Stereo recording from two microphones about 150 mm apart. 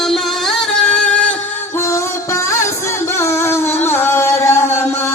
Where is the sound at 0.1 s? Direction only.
5° left (ahead or behind).